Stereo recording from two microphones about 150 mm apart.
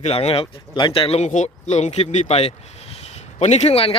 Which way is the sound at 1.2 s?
50° left (ahead or behind).